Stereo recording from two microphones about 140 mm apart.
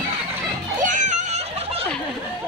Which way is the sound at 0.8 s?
60° right (ahead or behind).